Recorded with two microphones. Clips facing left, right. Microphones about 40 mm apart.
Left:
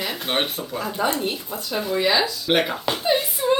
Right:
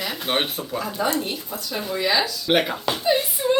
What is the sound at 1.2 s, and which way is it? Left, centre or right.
Speech, centre.